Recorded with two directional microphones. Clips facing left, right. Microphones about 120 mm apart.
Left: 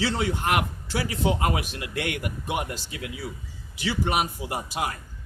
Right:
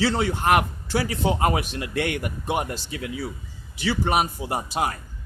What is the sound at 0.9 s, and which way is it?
A man's voice, 35° right (ahead or behind).